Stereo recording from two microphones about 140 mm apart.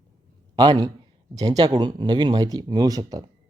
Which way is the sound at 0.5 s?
35° right (ahead or behind).